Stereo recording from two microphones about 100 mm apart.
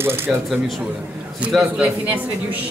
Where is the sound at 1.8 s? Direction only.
15° right (ahead or behind).